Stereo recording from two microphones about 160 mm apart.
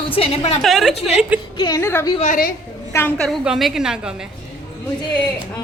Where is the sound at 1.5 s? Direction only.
25° left (ahead or behind).